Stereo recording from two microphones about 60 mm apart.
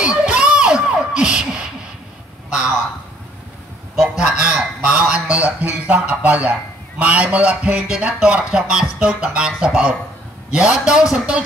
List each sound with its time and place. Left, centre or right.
0.0 s a sound: centre
4.0 s goose: centre
5.9 s speech: right